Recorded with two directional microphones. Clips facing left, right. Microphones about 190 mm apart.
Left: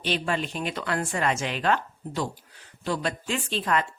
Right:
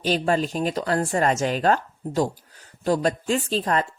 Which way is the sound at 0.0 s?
40° right (ahead or behind).